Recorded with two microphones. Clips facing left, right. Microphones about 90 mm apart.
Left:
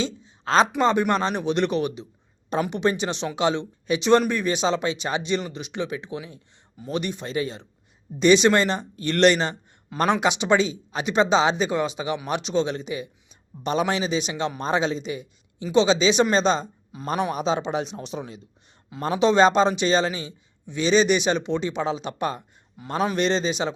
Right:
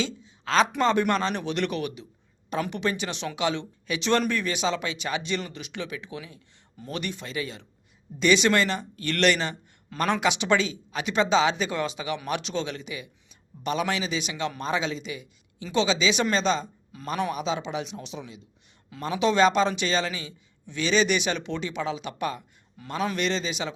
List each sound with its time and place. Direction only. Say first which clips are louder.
0.0 s a sound: left 2 dB; 30° left (ahead or behind)
0.8 s a man's voice: left 2 dB; 20° left (ahead or behind)
17.3 s speech: left 5 dB; 35° left (ahead or behind)